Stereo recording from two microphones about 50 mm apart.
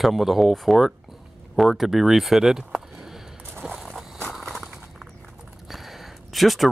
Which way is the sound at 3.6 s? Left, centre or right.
Right.